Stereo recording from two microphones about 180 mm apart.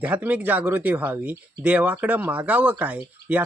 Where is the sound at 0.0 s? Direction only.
10° right (ahead or behind).